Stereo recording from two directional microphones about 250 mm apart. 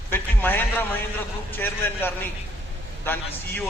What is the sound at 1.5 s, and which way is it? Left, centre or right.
A man's voice, centre.